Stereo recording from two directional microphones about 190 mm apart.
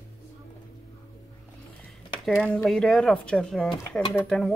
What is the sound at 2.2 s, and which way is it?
Speech, 5° left (ahead or behind).